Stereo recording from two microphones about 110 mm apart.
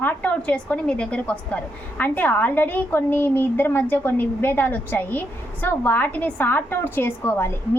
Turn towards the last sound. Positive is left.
turn(degrees=20)  # may be behind; listen again after turning